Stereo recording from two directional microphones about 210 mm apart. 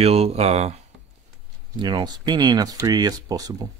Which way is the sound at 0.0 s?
30° right (ahead or behind).